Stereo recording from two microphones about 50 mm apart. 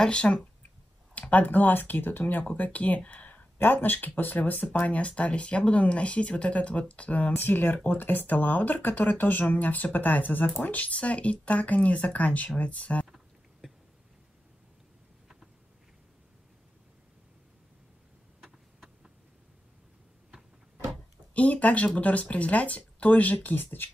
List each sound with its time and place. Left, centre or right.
0.0 s speech: left
1.1 s speech: left
3.1 s a sound: left
3.5 s speech: left
7.3 s speech: left
18.4 s a sound: centre
21.3 s speech: left